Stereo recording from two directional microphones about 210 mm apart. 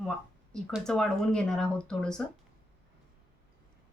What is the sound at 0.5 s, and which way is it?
Speech, centre (ahead or behind).